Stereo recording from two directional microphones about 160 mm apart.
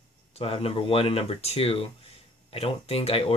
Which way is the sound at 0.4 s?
40° left (ahead or behind).